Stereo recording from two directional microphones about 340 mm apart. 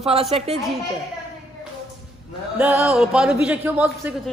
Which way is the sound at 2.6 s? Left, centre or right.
Centre.